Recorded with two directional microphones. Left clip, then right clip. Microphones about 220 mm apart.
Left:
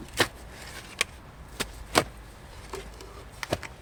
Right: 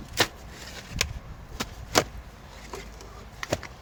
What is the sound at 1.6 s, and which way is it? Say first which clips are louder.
Vehicle: left 1 dB; 30° left (ahead or behind).